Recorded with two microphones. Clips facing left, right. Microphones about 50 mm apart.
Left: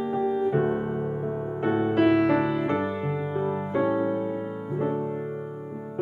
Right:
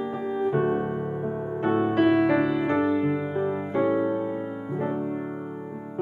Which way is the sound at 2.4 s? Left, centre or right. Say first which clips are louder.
Right 1 dB; centre.